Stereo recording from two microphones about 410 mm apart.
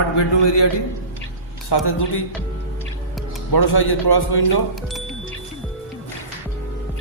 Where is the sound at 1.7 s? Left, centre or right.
Left.